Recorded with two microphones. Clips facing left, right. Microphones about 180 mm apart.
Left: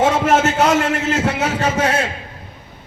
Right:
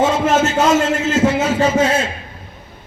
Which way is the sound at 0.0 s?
65° left (ahead or behind).